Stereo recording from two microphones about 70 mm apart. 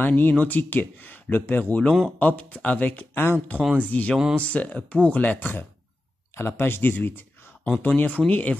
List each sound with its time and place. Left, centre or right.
0.0 s speech: left
1.9 s speech: centre
2.1 s speech: left
6.3 s speech: left